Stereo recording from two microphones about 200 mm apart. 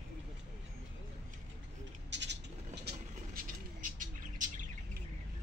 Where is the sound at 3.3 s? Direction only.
45° right (ahead or behind).